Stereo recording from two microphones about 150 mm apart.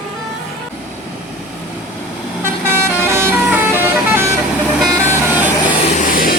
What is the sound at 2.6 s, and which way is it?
Vehicle, 15° right (ahead or behind).